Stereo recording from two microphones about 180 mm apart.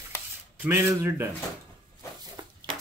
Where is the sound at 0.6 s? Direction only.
15° right (ahead or behind).